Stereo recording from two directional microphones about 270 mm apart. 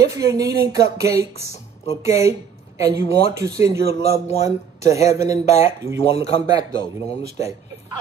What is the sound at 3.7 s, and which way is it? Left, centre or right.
Speech, right.